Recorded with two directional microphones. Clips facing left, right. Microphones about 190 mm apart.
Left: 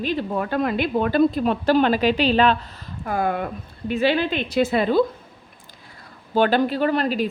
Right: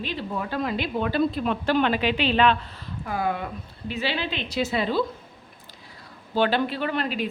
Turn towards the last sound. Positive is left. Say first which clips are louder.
# left 6 dB
turn(degrees=40)  # may be behind; listen again after turning